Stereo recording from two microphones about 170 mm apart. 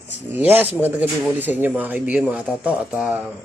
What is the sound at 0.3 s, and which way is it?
Speech, 10° right (ahead or behind).